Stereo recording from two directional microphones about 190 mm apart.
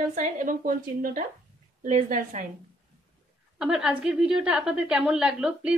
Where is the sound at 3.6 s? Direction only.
5° right (ahead or behind).